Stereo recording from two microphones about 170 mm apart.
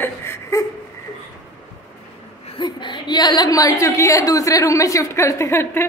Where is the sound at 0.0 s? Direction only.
15° left (ahead or behind).